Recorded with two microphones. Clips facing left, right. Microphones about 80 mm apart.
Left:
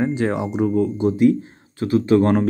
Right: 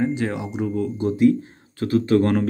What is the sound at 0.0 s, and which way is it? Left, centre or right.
Speech, left.